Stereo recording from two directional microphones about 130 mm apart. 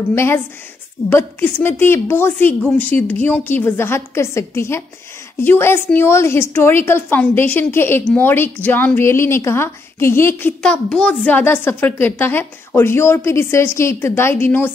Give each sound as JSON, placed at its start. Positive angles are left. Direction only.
{"t": 0.1, "sound": "a woman's voice", "side_deg": 20}
{"t": 10.6, "sound": "a woman's voice", "side_deg": 5}